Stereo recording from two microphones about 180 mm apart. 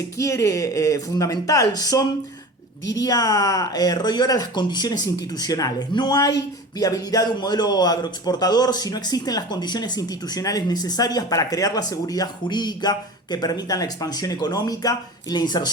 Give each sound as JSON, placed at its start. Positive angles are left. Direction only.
{"t": 0.2, "sound": "speech", "side_deg": 15}